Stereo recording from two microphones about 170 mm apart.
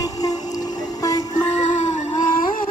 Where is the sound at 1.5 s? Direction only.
45° left (ahead or behind).